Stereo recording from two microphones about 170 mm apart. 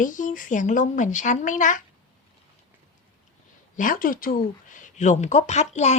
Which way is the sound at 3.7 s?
55° left (ahead or behind).